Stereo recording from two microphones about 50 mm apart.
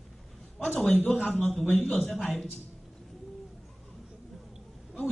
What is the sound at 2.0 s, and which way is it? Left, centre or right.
Speech, centre.